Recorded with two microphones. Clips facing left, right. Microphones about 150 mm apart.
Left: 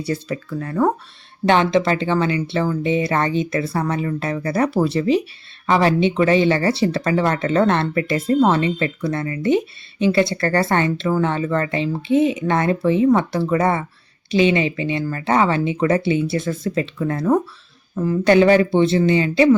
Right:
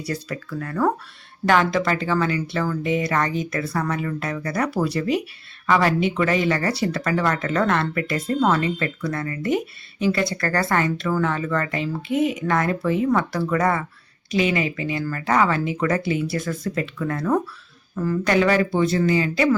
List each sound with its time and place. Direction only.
0.0 s speech: 25° left (ahead or behind)